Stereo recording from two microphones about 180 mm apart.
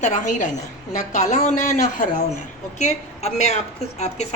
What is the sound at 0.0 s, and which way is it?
A woman's voice, 45° left (ahead or behind).